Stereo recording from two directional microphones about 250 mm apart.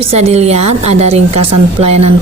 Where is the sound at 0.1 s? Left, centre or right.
Right.